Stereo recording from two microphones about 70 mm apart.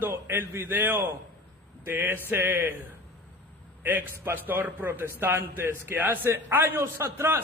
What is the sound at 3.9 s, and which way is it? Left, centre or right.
A man's voice, right.